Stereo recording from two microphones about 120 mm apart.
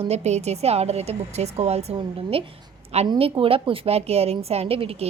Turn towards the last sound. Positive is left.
turn(degrees=-50)  # may be behind; listen again after turning